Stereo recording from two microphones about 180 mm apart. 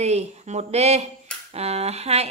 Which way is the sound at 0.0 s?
40° right (ahead or behind).